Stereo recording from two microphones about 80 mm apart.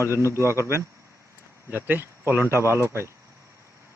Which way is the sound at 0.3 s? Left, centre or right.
Right.